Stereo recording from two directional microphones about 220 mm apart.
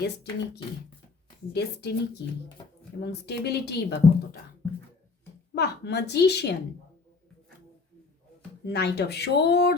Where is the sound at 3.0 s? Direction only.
50° left (ahead or behind).